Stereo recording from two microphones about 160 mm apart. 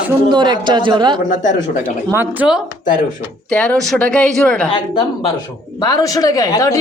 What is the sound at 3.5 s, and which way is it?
Speech, 5° left (ahead or behind).